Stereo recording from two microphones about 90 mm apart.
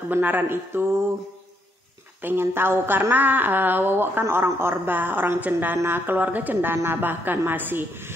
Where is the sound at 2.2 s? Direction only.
25° right (ahead or behind).